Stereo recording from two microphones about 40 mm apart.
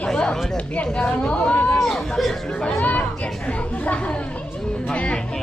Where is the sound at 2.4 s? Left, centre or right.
Centre.